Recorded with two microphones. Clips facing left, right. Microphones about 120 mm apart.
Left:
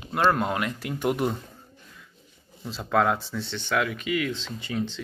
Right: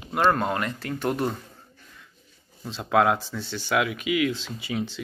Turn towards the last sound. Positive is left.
turn(degrees=-5)  # may be behind; listen again after turning